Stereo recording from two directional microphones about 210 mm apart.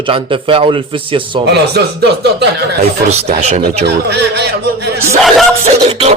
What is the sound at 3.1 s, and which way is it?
Speech, 30° right (ahead or behind).